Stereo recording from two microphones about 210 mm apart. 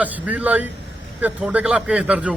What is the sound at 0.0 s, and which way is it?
A man's voice, 5° right (ahead or behind).